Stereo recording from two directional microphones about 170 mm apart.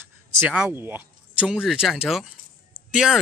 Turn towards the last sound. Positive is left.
turn(degrees=-5)  # may be behind; listen again after turning